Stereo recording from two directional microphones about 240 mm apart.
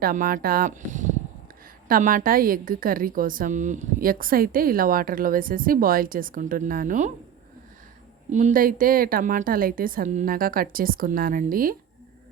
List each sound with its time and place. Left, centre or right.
0.0 s a woman's voice: right
8.3 s a woman's voice: right